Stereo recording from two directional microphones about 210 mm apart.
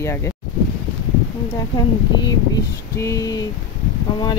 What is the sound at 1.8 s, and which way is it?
Speech, 15° left (ahead or behind).